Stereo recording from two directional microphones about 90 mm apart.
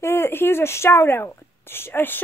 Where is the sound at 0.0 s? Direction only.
30° left (ahead or behind).